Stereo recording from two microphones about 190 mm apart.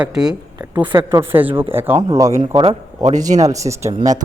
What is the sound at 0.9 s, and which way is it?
Speech, 25° right (ahead or behind).